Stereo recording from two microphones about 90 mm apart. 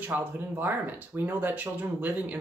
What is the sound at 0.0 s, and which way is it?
Speech, 20° right (ahead or behind).